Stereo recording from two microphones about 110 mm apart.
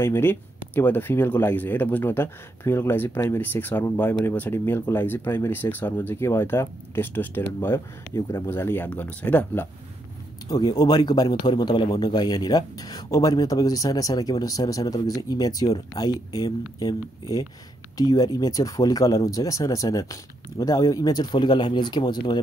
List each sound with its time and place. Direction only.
0.0 s speech: 20° left (ahead or behind)
10.5 s speech: 35° left (ahead or behind)